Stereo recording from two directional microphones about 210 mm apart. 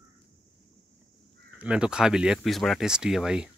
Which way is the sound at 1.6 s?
5° right (ahead or behind).